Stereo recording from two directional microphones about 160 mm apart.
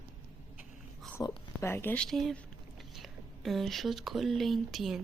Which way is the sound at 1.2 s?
20° left (ahead or behind).